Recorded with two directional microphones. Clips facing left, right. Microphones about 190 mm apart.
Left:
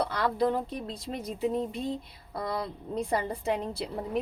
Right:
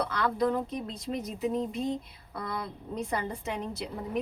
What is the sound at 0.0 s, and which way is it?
A woman's voice, 30° left (ahead or behind).